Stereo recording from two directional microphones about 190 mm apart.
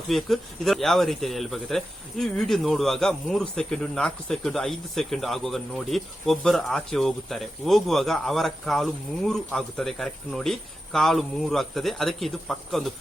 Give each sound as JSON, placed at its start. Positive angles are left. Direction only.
{"t": 0.1, "sound": "speech", "side_deg": 0}